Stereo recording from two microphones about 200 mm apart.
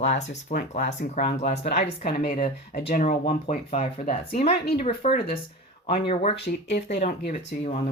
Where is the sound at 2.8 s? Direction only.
35° left (ahead or behind).